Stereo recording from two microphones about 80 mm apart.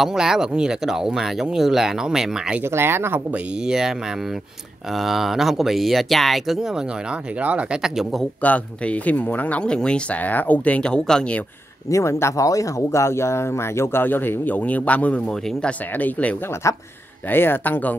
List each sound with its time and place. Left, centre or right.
0.0 s speech: centre
2.6 s speech: right
3.3 s speech: centre
7.8 s speech: centre
8.4 s speech: centre
11.9 s speech: left; by 16.3 s centre
16.6 s speech: left
17.3 s speech: left